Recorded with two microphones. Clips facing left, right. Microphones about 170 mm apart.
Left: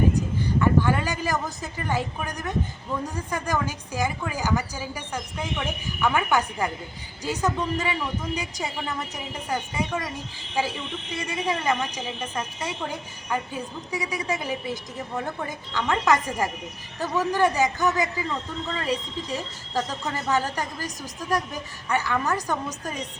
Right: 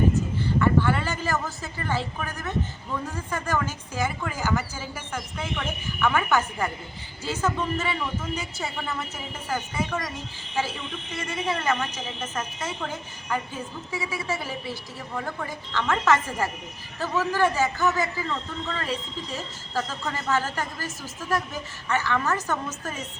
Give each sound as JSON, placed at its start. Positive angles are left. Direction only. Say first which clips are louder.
{"t": 0.3, "sound": "a woman's voice", "louder": "left 1 dB", "side_deg": 15}